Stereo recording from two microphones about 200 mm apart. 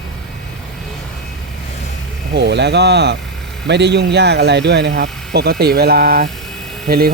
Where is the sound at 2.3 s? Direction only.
60° right (ahead or behind).